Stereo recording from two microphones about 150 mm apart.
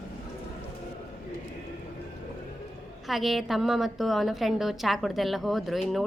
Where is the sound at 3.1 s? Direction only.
Centre (ahead or behind).